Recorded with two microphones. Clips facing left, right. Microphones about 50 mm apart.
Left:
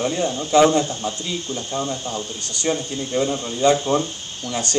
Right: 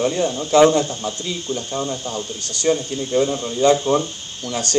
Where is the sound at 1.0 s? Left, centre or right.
Left.